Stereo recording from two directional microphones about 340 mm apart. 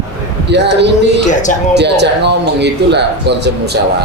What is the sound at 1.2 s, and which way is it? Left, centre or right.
Speech, left.